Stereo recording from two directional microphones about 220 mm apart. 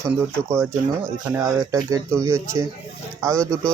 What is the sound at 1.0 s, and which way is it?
Speech, 15° right (ahead or behind).